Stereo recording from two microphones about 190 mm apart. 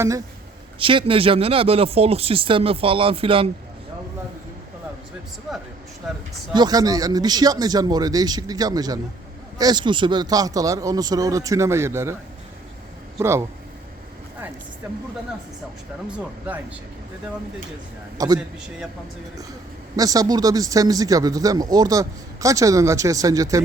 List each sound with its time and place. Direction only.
0.8 s speech: 25° right (ahead or behind)
5.5 s speech: centre (ahead or behind)
6.5 s speech: 20° right (ahead or behind)
13.1 s speech: 15° right (ahead or behind)
18.2 s speech: 20° right (ahead or behind)
20.0 s speech: 20° right (ahead or behind)